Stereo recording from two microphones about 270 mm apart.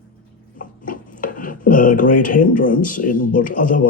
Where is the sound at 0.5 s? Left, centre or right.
Left.